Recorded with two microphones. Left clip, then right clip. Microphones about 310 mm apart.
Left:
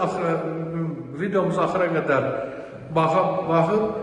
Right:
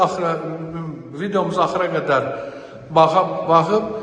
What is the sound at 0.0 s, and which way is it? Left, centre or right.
A man's voice, centre.